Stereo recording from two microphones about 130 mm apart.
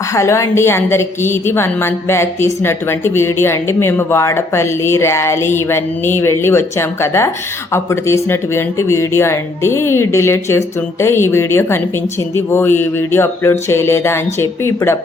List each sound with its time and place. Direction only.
0.1 s a woman's voice: 20° left (ahead or behind)